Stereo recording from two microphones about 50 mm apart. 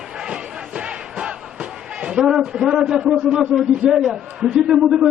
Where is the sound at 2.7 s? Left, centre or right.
Centre.